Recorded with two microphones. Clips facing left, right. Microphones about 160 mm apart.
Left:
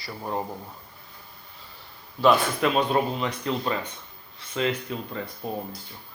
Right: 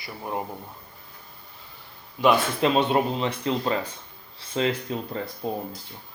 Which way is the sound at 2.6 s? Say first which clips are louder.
Right 4 dB; 30° right (ahead or behind).